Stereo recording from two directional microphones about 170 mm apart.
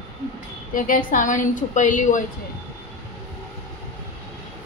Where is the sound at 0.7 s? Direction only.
55° left (ahead or behind).